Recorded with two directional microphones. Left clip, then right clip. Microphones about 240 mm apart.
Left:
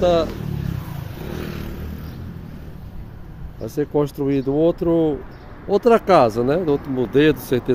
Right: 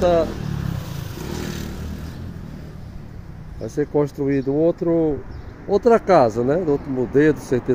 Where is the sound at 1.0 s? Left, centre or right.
Right.